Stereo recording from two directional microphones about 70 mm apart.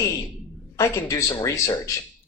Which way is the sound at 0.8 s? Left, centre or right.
Left.